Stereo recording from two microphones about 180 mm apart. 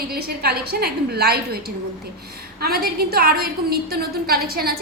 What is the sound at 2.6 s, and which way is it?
A woman's voice, 60° right (ahead or behind).